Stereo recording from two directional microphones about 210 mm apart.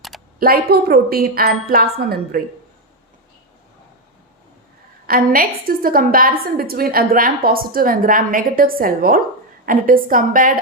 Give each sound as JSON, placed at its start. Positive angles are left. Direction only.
{"t": 0.3, "sound": "a woman's voice", "side_deg": -45}
{"t": 5.0, "sound": "a woman's voice", "side_deg": -45}